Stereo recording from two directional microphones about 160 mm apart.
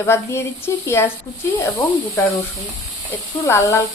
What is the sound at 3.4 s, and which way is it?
Speech, 15° left (ahead or behind).